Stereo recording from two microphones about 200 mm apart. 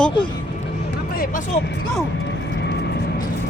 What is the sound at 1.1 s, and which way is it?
Speech, 45° left (ahead or behind).